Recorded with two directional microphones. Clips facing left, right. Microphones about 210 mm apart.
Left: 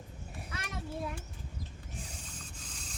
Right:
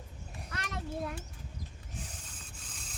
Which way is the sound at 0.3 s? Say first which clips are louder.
Right 1 dB; 5° left (ahead or behind).